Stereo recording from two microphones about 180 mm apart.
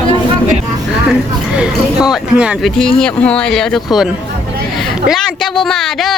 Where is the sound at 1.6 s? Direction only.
5° right (ahead or behind).